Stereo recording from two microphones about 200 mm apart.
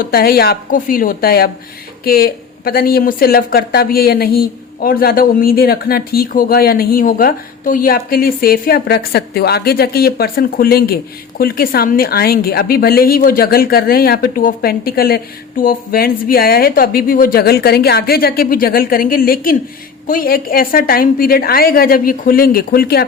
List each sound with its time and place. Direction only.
0.0 s speech: 50° left (ahead or behind)